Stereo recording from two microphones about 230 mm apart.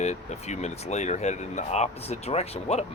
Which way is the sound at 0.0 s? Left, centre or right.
Left.